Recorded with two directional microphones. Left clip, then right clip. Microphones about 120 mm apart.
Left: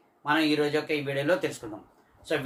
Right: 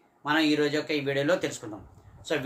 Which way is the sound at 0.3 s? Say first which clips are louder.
Even; 40° right (ahead or behind).